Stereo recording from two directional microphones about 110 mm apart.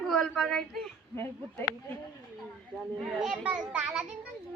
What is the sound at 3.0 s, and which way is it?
A woman's voice, centre (ahead or behind).